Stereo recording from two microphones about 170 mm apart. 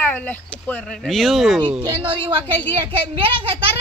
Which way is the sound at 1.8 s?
30° right (ahead or behind).